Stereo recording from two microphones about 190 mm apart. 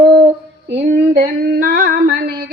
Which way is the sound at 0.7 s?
35° right (ahead or behind).